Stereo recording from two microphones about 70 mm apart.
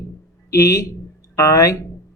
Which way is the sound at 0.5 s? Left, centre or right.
Left.